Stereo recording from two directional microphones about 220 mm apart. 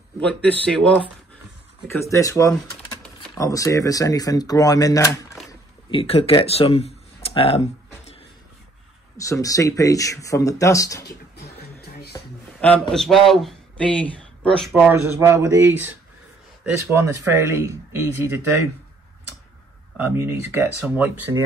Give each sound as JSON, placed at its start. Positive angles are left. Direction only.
{"t": 0.2, "sound": "a man's voice", "side_deg": 5}
{"t": 5.5, "sound": "a sound", "side_deg": 25}
{"t": 9.2, "sound": "speech", "side_deg": 15}
{"t": 12.1, "sound": "a sound", "side_deg": 5}
{"t": 12.9, "sound": "a man's voice", "side_deg": 0}
{"t": 16.9, "sound": "speech", "side_deg": -10}
{"t": 20.0, "sound": "speech", "side_deg": -10}